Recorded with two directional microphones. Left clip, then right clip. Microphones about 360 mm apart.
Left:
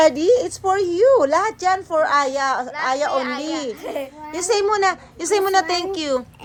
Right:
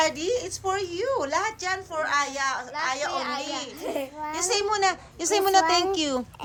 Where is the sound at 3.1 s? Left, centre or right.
Centre.